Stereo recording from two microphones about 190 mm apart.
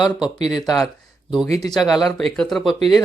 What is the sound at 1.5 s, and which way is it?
Speech, 20° left (ahead or behind).